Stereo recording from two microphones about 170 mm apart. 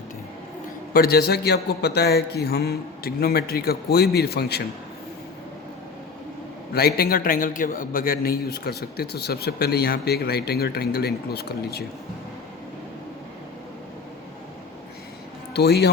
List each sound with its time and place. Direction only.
0.9 s a man's voice: 65° left (ahead or behind)
6.7 s a man's voice: 65° left (ahead or behind)
15.5 s a man's voice: 75° left (ahead or behind)